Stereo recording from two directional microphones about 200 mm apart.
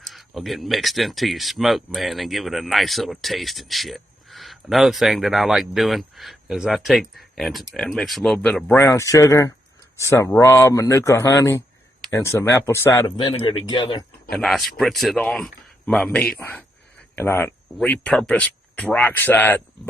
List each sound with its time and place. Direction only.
0.0 s speech: centre (ahead or behind); by 14.0 s 20° left (ahead or behind)
14.3 s speech: 5° left (ahead or behind)